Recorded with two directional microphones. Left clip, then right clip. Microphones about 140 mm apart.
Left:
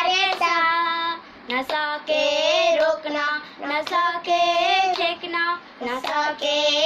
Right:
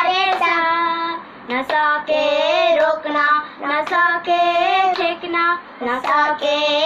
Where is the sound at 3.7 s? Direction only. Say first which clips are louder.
Right 5 dB; centre (ahead or behind).